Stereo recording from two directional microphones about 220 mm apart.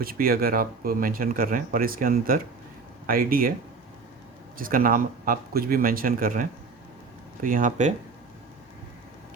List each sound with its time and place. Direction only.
0.0 s speech: 40° right (ahead or behind)
4.5 s speech: 40° right (ahead or behind)